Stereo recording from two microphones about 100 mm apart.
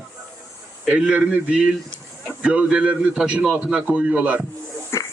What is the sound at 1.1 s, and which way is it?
A man's voice, 10° right (ahead or behind).